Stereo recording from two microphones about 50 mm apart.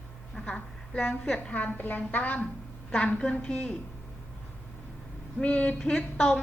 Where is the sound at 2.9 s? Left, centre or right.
Left.